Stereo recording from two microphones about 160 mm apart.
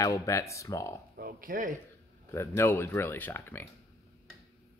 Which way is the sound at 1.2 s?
60° right (ahead or behind).